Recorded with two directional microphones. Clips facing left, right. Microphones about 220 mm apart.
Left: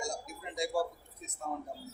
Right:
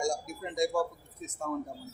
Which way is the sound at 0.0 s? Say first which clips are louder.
Right 7 dB; 45° right (ahead or behind).